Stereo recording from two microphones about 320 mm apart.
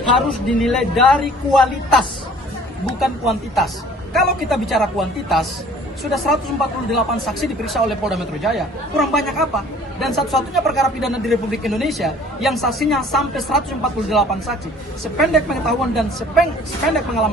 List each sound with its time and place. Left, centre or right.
0.1 s a man's voice: centre